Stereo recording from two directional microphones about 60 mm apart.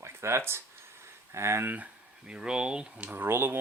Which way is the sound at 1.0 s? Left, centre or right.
Right.